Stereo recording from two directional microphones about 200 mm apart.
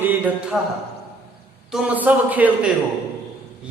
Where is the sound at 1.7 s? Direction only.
10° right (ahead or behind).